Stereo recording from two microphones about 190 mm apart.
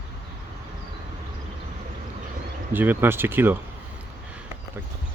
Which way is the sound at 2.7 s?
10° right (ahead or behind).